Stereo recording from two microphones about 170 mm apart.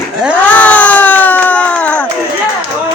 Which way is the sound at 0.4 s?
10° left (ahead or behind).